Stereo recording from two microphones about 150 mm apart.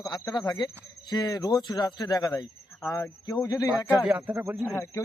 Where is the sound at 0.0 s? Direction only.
25° left (ahead or behind).